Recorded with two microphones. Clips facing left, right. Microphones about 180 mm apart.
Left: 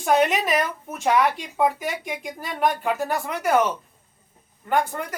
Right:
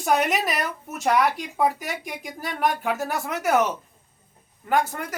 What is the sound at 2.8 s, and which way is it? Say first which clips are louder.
Speech: left 2 dB; 5° right (ahead or behind).